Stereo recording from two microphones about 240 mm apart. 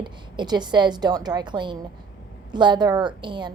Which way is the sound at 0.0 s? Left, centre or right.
Centre.